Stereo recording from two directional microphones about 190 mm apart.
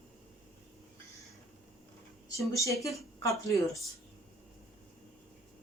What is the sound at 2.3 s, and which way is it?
Speech, 15° left (ahead or behind).